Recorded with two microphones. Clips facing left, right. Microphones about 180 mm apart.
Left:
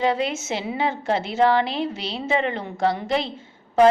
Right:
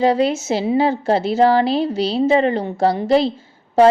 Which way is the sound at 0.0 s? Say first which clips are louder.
Right 6 dB; 35° right (ahead or behind).